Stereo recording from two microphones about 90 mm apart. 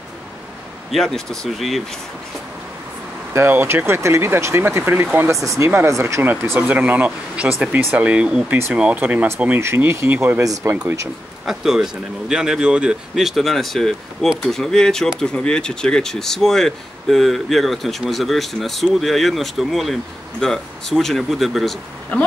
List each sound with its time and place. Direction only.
0.9 s speech: 5° left (ahead or behind)
3.3 s speech: 25° right (ahead or behind)
5.4 s speech: 35° right (ahead or behind)
6.7 s speech: 20° right (ahead or behind)
9.6 s speech: 30° right (ahead or behind)
10.4 s speech: 35° right (ahead or behind)
11.4 s speech: 5° right (ahead or behind)